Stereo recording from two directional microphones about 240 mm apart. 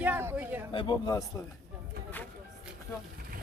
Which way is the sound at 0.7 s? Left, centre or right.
Centre.